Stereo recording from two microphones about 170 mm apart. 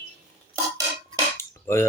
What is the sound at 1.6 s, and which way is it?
Cutlery, 15° left (ahead or behind).